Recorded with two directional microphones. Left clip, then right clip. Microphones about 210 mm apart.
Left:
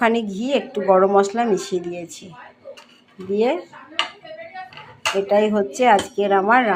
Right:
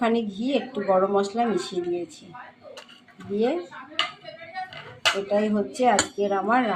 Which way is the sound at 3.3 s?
30° left (ahead or behind).